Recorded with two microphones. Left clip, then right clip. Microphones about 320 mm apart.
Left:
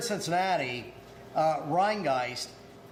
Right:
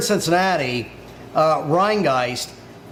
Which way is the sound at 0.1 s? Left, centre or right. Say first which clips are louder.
Right 9 dB; right.